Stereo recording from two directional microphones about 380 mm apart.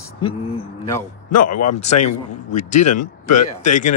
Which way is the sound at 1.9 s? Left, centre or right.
Centre.